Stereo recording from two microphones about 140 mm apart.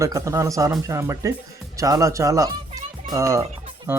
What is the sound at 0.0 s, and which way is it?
Speech, 20° right (ahead or behind).